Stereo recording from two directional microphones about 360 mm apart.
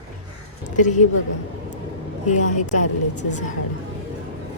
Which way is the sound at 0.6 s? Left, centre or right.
Left.